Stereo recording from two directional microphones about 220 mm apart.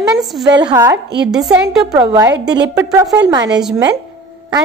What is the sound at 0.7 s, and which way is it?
Speech, 15° right (ahead or behind).